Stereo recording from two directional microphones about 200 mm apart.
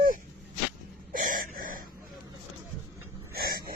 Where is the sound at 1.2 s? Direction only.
45° right (ahead or behind).